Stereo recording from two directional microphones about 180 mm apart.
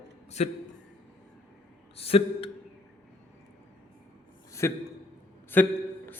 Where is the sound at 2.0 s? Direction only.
35° left (ahead or behind).